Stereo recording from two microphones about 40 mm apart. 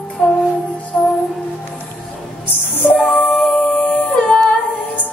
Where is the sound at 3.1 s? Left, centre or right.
Left.